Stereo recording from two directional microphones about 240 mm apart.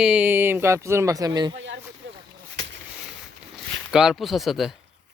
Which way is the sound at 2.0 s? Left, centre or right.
Right.